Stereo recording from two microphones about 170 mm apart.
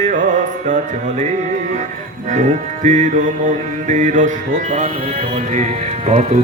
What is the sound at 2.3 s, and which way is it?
Music, 45° right (ahead or behind).